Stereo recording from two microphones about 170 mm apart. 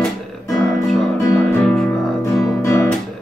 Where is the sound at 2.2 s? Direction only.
15° left (ahead or behind).